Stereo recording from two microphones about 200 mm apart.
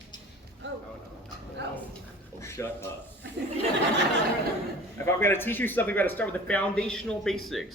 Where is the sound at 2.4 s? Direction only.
15° left (ahead or behind).